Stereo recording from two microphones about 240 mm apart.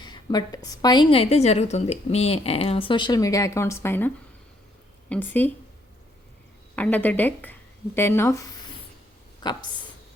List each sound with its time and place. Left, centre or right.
0.0 s a woman's voice: centre
6.7 s a woman's voice: centre